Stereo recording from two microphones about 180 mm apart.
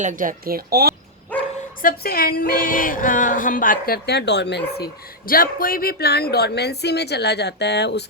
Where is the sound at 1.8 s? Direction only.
60° left (ahead or behind).